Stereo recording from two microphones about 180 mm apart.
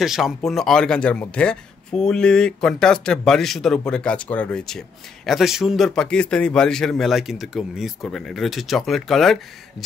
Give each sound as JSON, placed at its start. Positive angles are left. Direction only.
{"t": 0.0, "sound": "speech", "side_deg": 0}